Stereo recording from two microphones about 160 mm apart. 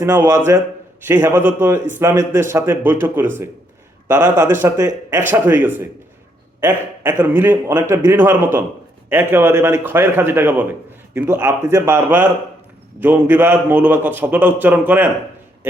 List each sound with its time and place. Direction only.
0.0 s speech: 15° right (ahead or behind)